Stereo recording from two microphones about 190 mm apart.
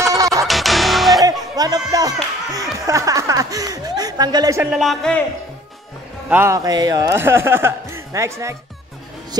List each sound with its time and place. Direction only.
0.1 s music: 15° right (ahead or behind)
0.5 s music: centre (ahead or behind)
1.6 s a man's voice: 20° right (ahead or behind)
4.7 s speech: centre (ahead or behind)
6.3 s a man's voice: 15° right (ahead or behind)